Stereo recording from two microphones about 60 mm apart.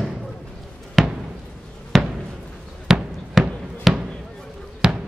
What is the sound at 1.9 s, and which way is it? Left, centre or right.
Basketball bounce, centre.